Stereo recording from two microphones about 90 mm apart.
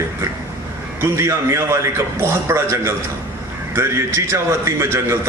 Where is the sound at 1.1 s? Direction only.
30° right (ahead or behind).